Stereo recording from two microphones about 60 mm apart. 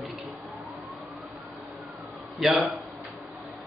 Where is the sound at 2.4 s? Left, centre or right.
Centre.